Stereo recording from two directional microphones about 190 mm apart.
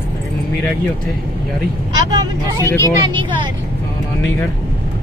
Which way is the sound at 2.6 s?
15° left (ahead or behind).